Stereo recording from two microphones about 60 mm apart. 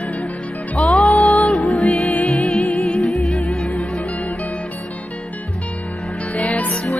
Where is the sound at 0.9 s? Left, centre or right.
Centre.